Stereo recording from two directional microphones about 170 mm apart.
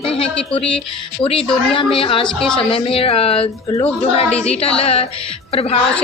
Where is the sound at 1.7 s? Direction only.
30° left (ahead or behind).